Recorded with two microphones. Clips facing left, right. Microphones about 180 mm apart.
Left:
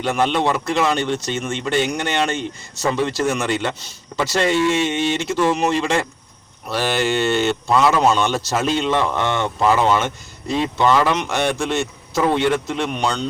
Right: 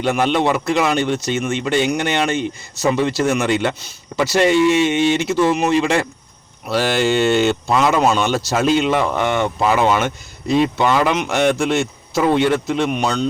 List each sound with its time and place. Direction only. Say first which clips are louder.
0.0 s a man's voice: right 2 dB; 15° right (ahead or behind)
8.0 s a man's voice: right 1 dB; 10° right (ahead or behind)